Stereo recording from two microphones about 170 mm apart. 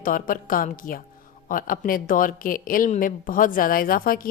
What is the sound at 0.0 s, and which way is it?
A woman's voice, 55° left (ahead or behind).